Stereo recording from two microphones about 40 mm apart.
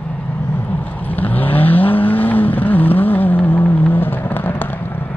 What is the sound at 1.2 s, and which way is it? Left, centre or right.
Vehicle, left.